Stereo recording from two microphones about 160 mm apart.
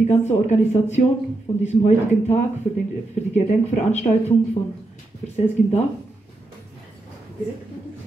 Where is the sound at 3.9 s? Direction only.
45° left (ahead or behind).